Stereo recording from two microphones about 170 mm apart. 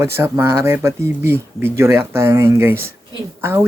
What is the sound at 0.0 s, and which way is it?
Speech, 15° right (ahead or behind).